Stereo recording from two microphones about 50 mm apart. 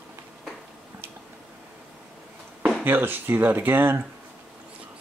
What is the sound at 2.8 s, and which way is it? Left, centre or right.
Speech, right.